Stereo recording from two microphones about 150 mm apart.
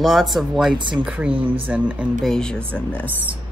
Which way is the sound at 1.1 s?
10° right (ahead or behind).